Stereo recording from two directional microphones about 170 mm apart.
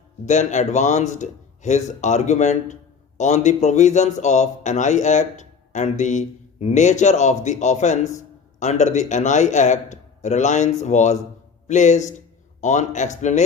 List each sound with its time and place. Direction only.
0.3 s speech: 45° left (ahead or behind)